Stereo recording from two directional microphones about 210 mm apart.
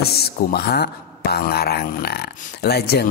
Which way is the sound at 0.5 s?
50° left (ahead or behind).